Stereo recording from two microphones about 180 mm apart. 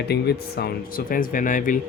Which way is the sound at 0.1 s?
65° left (ahead or behind).